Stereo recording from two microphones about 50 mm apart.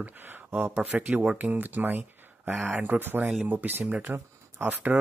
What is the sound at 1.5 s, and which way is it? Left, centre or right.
Speech, right.